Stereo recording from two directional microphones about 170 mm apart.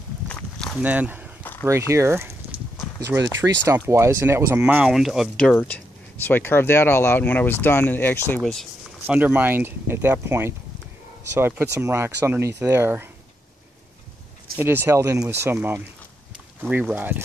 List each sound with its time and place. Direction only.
0.3 s walk: 5° left (ahead or behind)
0.8 s speech: 10° right (ahead or behind)
1.4 s a sound: 10° left (ahead or behind)
1.7 s speech: 15° right (ahead or behind)
5.5 s speech: 10° left (ahead or behind)
8.4 s speech: centre (ahead or behind); by 13.1 s 15° right (ahead or behind)
14.6 s speech: 15° right (ahead or behind)